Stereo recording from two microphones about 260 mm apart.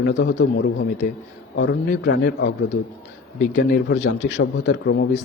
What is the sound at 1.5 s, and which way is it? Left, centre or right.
A man's voice, left.